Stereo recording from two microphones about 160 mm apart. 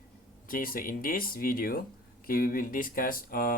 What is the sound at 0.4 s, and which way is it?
Speech, 60° left (ahead or behind).